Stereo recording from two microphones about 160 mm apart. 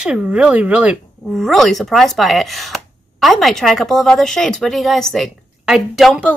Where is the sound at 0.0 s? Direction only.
5° right (ahead or behind).